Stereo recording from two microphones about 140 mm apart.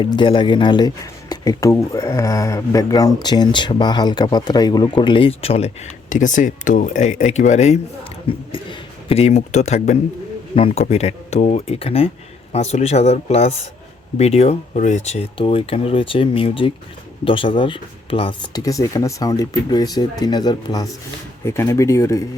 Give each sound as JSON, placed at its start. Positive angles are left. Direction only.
{"t": 0.0, "sound": "a man's voice", "side_deg": 35}
{"t": 9.0, "sound": "speech", "side_deg": 45}
{"t": 10.5, "sound": "speech", "side_deg": 40}
{"t": 15.4, "sound": "a man's voice", "side_deg": 40}
{"t": 18.5, "sound": "speech", "side_deg": 25}